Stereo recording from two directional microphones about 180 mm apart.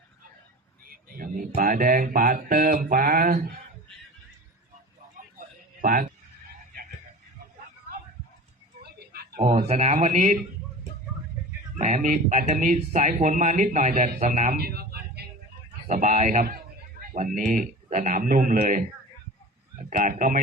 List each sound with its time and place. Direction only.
0.9 s speech: 50° right (ahead or behind)
5.4 s a sound: 50° right (ahead or behind)
8.8 s a sound: 60° right (ahead or behind)
9.4 s speech: 40° right (ahead or behind)
11.8 s speech: 45° right (ahead or behind); by 15.3 s 60° right (ahead or behind)
15.9 s speech: 45° right (ahead or behind)
19.9 s speech: 50° right (ahead or behind)